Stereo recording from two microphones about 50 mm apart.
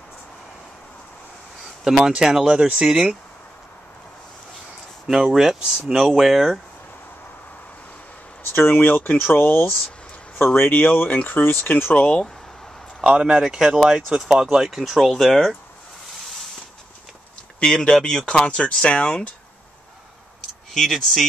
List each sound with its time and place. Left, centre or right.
1.9 s speech: centre
5.0 s speech: centre
8.5 s speech: left
11.1 s speech: left
11.9 s speech: left
13.0 s speech: centre
17.6 s speech: centre
20.7 s speech: centre